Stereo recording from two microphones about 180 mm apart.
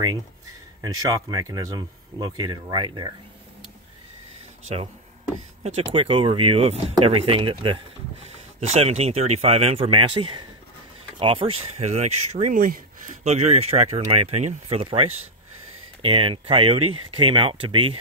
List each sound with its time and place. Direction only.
0.8 s speech: 20° right (ahead or behind)
5.8 s speech: 30° right (ahead or behind); by 13.1 s 50° right (ahead or behind)
13.2 s speech: 40° right (ahead or behind)